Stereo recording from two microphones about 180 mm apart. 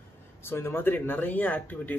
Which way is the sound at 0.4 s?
15° left (ahead or behind).